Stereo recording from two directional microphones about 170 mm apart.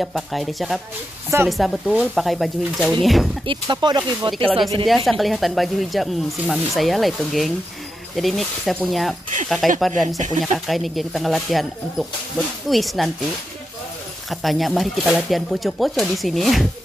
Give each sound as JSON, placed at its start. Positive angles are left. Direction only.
{"t": 0.0, "sound": "speech", "side_deg": 0}
{"t": 3.4, "sound": "speech", "side_deg": -25}
{"t": 4.3, "sound": "speech", "side_deg": 5}
{"t": 10.0, "sound": "speech", "side_deg": -45}
{"t": 10.7, "sound": "speech", "side_deg": 0}
{"t": 14.3, "sound": "speech", "side_deg": 0}